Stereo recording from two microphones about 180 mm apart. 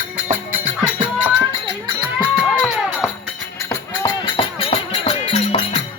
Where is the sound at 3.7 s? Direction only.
25° left (ahead or behind).